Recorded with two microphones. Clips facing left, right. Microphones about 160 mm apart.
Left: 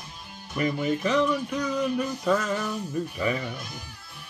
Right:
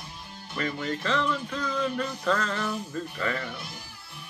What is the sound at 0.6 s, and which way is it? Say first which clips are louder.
Music: left 5 dB; 15° left (ahead or behind).